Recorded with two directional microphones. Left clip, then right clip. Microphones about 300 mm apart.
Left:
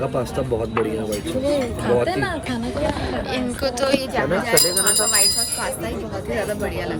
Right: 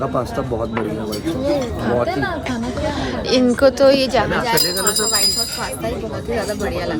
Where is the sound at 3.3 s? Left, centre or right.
Right.